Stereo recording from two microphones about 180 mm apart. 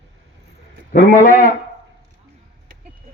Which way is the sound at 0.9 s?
50° left (ahead or behind).